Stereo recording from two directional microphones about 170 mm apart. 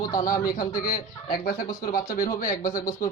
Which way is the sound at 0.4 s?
55° left (ahead or behind).